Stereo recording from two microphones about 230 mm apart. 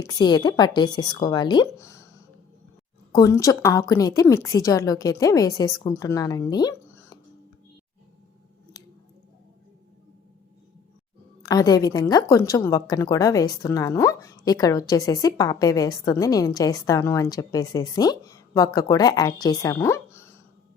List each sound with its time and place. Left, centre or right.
0.0 s a woman's voice: centre
3.1 s a woman's voice: centre
11.4 s a woman's voice: centre